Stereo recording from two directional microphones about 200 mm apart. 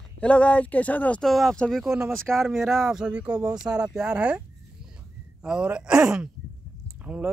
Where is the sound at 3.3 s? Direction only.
15° right (ahead or behind).